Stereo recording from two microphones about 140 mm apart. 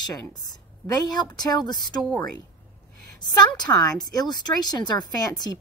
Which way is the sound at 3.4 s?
30° left (ahead or behind).